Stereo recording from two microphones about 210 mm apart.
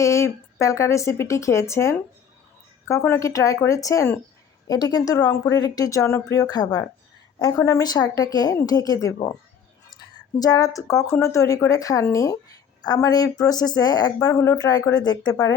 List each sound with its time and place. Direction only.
0.0 s speech: 15° left (ahead or behind)